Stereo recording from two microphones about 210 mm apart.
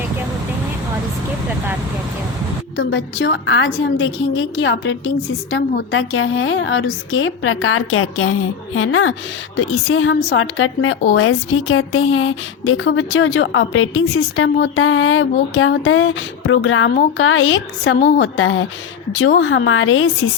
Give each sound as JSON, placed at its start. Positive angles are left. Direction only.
{"t": 2.7, "sound": "a woman's voice", "side_deg": 65}
{"t": 10.2, "sound": "a woman's voice", "side_deg": 50}
{"t": 10.6, "sound": "speech", "side_deg": 75}